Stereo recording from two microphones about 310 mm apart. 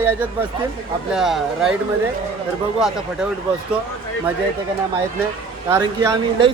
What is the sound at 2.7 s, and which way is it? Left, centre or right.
Speech, centre.